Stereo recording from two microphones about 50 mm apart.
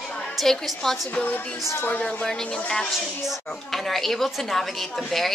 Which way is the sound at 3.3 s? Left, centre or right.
Centre.